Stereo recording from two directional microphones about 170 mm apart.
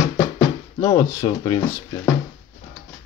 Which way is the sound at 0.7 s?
20° left (ahead or behind).